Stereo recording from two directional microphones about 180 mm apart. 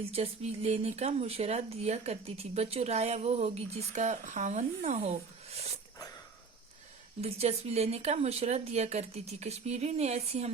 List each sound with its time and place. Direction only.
0.0 s speech: 35° right (ahead or behind)
7.2 s speech: 35° right (ahead or behind)